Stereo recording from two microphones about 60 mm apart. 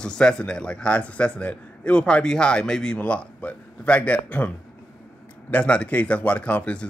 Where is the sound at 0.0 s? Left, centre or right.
Centre.